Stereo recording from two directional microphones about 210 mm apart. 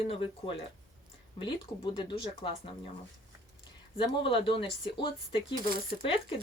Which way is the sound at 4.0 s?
25° left (ahead or behind).